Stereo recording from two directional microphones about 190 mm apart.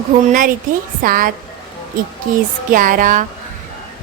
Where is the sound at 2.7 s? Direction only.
45° right (ahead or behind).